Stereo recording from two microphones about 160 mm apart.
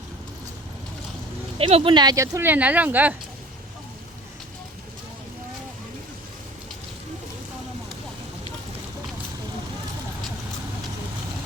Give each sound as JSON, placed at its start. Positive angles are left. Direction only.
{"t": 1.5, "sound": "speech", "side_deg": -35}